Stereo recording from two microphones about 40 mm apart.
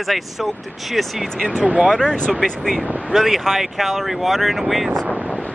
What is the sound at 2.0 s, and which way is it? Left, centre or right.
Speech, left.